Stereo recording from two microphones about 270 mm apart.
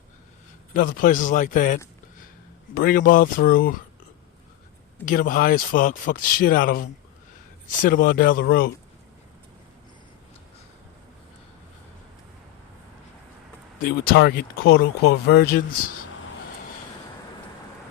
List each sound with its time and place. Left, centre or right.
0.7 s a man's voice: left
5.0 s speech: left
7.9 s speech: left
13.8 s speech: left